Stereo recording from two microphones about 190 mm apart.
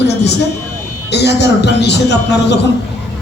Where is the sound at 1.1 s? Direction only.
65° left (ahead or behind).